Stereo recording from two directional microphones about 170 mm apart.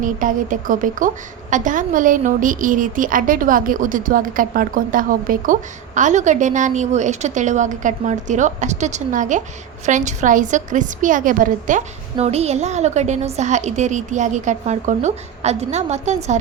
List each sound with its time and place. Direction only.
0.0 s a woman's voice: 50° right (ahead or behind)